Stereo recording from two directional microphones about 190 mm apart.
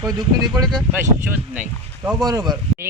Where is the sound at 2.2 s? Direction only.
20° right (ahead or behind).